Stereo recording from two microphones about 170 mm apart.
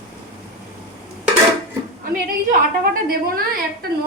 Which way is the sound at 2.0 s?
55° right (ahead or behind).